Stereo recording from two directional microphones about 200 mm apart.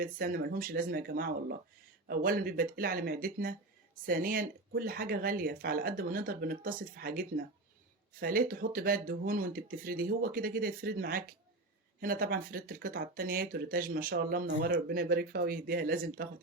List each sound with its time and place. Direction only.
0.0 s speech: 45° right (ahead or behind)